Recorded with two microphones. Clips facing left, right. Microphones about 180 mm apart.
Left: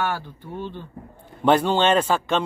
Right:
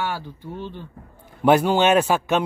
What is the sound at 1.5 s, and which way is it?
Speech, 10° right (ahead or behind).